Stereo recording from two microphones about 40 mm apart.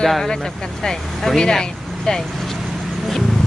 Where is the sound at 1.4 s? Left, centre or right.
Centre.